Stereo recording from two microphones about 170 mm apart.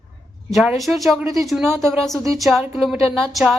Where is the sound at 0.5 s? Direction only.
Centre (ahead or behind).